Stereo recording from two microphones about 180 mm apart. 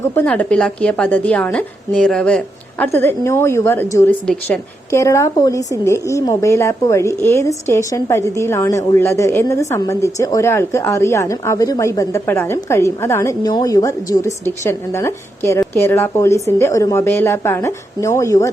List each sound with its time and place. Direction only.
0.0 s a woman's voice: 15° left (ahead or behind)